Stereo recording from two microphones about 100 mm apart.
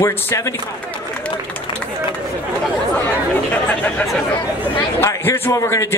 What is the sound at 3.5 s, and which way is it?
Speech, 15° left (ahead or behind).